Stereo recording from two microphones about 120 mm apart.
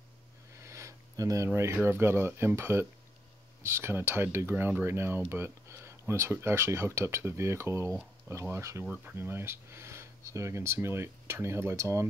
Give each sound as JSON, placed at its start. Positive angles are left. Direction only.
{"t": 0.6, "sound": "speech", "side_deg": -25}
{"t": 8.8, "sound": "speech", "side_deg": -15}